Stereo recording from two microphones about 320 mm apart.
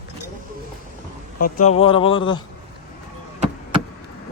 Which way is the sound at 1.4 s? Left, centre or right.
Left.